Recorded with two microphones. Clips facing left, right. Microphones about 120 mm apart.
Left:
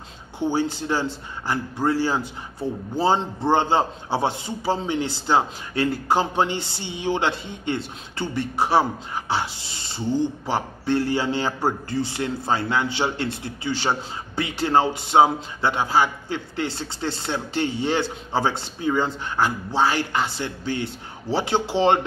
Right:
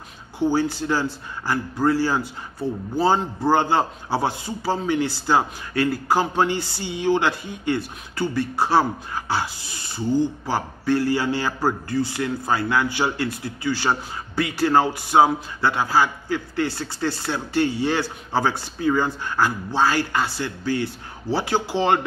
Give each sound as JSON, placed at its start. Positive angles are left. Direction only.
{"t": 0.4, "sound": "a man's voice", "side_deg": 20}